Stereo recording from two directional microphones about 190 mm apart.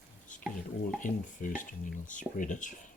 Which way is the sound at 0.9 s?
45° left (ahead or behind).